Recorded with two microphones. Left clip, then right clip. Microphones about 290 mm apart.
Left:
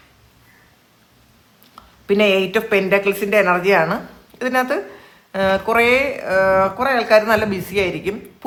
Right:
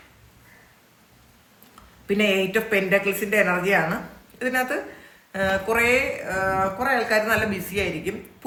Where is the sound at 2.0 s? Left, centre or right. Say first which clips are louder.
Left 6 dB; centre.